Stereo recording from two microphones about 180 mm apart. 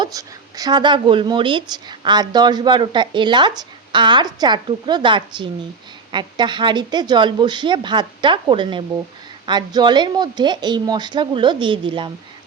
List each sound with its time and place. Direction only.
0.0 s a woman's voice: 20° right (ahead or behind)